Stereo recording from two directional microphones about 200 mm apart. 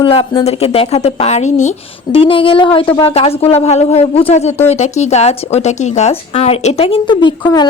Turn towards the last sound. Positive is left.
turn(degrees=25)  # may be behind; listen again after turning